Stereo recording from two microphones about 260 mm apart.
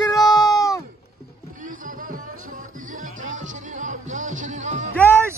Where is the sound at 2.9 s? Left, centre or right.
Right.